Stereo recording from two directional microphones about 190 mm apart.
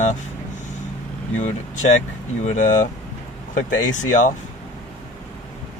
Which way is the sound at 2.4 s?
40° left (ahead or behind).